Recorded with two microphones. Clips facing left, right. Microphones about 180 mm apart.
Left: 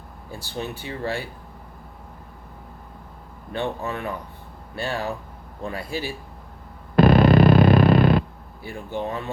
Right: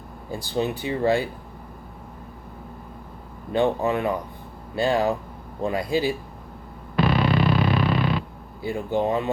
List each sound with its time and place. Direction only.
0.3 s speech: 15° right (ahead or behind)
3.8 s speech: 15° right (ahead or behind)
6.9 s music: 45° left (ahead or behind)
8.6 s speech: 15° right (ahead or behind)